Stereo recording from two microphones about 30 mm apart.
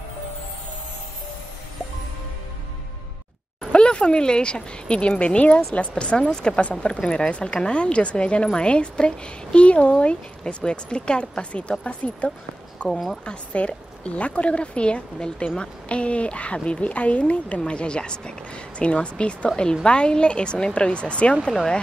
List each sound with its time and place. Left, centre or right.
3.7 s a woman's voice: left
16.5 s a woman's voice: left
16.8 s a woman's voice: left
21.5 s speech: centre